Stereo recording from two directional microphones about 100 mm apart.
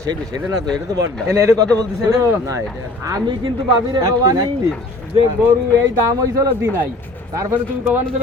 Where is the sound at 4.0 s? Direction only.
35° right (ahead or behind).